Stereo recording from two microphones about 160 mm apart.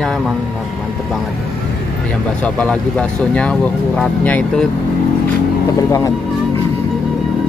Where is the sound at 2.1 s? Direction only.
5° left (ahead or behind).